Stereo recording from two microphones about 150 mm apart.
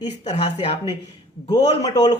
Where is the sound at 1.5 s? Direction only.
25° left (ahead or behind).